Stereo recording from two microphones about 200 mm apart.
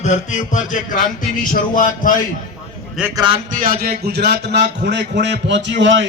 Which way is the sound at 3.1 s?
25° right (ahead or behind).